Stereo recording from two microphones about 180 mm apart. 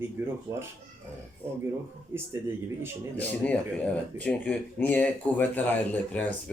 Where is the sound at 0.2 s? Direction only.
15° right (ahead or behind).